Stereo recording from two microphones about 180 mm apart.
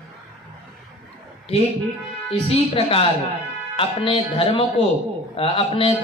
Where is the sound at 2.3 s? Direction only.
30° left (ahead or behind).